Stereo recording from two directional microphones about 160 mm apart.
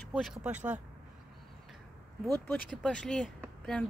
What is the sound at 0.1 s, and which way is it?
Speech, 5° right (ahead or behind).